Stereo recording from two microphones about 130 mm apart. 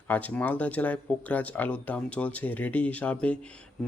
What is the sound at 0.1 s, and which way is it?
Speech, 10° left (ahead or behind).